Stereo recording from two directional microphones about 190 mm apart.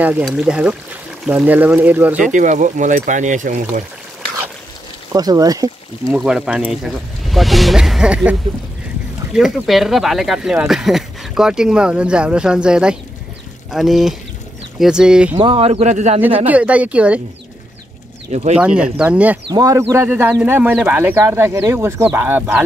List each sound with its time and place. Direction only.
0.0 s speech: 5° right (ahead or behind)
2.2 s speech: 40° right (ahead or behind)
5.1 s speech: 20° right (ahead or behind)
6.1 s speech: 5° right (ahead or behind)
15.3 s speech: 25° right (ahead or behind)
16.4 s speech: 5° right (ahead or behind)
18.3 s speech: 35° right (ahead or behind)
18.6 s speech: 5° right (ahead or behind)